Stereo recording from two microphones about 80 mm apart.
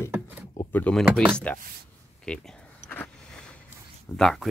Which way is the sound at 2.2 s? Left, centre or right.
Centre.